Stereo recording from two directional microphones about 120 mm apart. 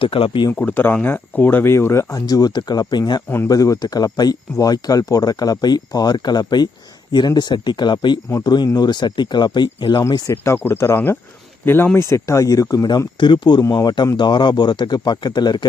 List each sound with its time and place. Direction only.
0.0 s speech: 50° left (ahead or behind)
0.6 s speech: 15° left (ahead or behind); by 3.2 s 35° left (ahead or behind)
3.2 s speech: 20° left (ahead or behind)
3.5 s speech: 30° left (ahead or behind)